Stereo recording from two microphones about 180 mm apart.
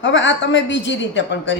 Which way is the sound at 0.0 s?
90° left.